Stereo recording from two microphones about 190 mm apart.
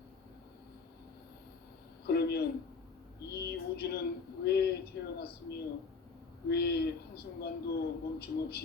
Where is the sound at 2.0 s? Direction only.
60° left (ahead or behind).